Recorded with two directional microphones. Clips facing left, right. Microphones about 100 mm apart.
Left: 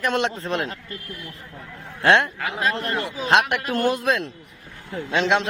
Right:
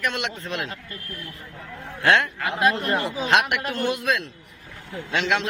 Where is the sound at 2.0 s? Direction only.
25° left (ahead or behind).